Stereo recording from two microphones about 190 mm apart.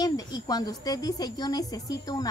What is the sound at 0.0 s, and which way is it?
Speech, 20° left (ahead or behind).